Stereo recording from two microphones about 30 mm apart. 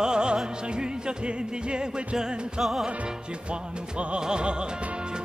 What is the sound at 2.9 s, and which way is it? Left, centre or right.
Music, right.